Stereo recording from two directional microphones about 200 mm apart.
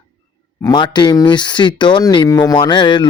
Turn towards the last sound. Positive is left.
turn(degrees=25)  # may be behind; listen again after turning